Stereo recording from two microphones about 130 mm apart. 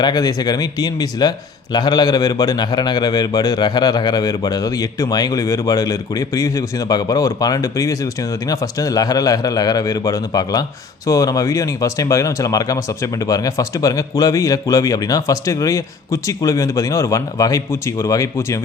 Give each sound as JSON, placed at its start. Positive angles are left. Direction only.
{"t": 0.0, "sound": "a man's voice", "side_deg": 30}